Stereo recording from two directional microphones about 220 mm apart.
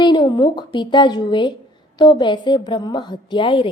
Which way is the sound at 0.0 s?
20° left (ahead or behind).